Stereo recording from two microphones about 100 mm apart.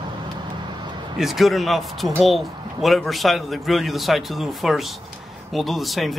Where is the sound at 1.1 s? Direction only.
Centre (ahead or behind).